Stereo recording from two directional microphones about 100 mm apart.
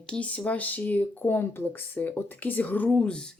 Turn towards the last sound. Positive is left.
turn(degrees=10)  # may be behind; listen again after turning